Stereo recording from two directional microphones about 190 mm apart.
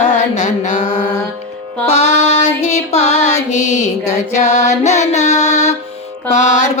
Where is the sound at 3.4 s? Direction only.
35° left (ahead or behind).